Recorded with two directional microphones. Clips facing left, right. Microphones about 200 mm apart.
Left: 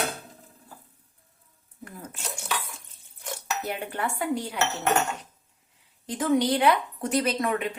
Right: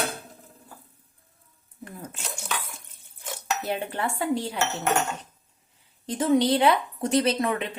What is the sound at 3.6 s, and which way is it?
Speech, 30° right (ahead or behind).